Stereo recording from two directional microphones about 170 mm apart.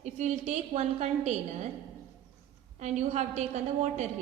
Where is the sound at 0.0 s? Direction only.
40° right (ahead or behind).